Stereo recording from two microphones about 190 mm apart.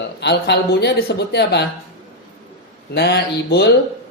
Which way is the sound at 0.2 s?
60° left (ahead or behind).